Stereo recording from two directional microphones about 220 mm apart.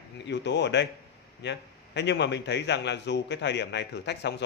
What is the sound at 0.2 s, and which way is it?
A man's voice, 50° left (ahead or behind).